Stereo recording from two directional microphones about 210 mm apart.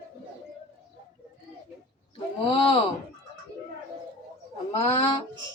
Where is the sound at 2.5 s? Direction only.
25° left (ahead or behind).